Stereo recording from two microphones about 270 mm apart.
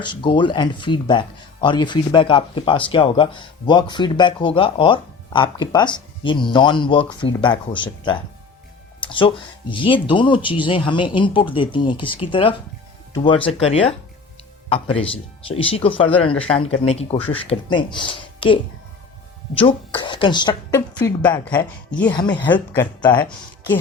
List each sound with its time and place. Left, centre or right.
0.0 s speech: centre